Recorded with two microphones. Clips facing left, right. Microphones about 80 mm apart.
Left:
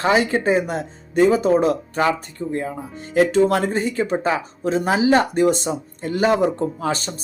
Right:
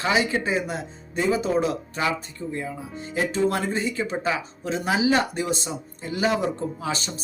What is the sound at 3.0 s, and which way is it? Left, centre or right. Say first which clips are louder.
Speech: left 8 dB; left.